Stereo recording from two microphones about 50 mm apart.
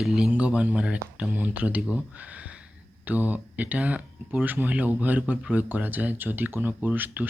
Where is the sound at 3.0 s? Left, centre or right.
Right.